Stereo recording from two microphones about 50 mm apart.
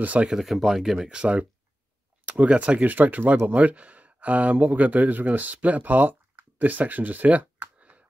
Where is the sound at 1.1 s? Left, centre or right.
Right.